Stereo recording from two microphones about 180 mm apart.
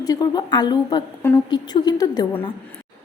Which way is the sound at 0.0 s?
20° left (ahead or behind).